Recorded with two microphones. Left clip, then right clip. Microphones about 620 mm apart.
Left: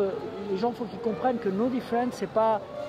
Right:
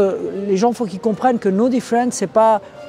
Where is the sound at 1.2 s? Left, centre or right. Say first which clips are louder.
Right 11 dB; right.